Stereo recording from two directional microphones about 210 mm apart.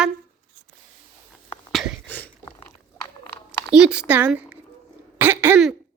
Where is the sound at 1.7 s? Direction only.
5° left (ahead or behind).